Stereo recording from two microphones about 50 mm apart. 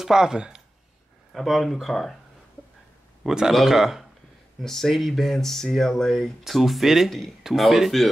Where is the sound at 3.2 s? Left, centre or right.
Centre.